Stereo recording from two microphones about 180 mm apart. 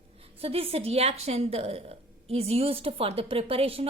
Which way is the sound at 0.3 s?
35° right (ahead or behind).